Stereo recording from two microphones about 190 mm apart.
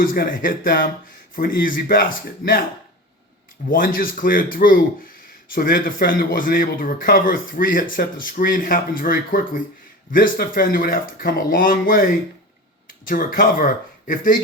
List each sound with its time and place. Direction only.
0.0 s speech: 50° left (ahead or behind)
3.7 s speech: 50° left (ahead or behind)